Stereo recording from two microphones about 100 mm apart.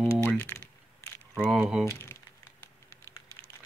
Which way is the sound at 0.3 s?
20° left (ahead or behind).